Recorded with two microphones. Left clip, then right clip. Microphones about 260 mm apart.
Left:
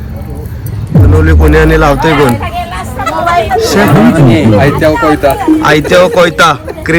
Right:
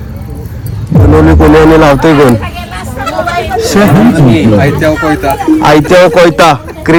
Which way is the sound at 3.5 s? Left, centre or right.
Centre.